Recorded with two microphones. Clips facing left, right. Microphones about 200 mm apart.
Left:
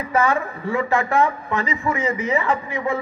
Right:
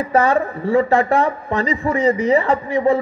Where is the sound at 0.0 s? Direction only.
35° right (ahead or behind).